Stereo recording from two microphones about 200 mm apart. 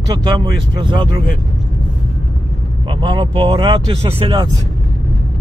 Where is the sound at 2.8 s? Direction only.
25° right (ahead or behind).